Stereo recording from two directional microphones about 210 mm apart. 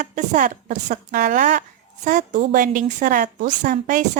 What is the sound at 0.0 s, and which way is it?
A woman's voice, 35° right (ahead or behind).